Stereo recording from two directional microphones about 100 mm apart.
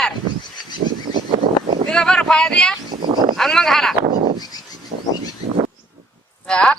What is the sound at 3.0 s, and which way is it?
Sheep, 50° right (ahead or behind).